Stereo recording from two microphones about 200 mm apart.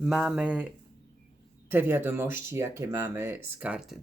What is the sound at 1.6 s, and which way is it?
Speech, 10° right (ahead or behind).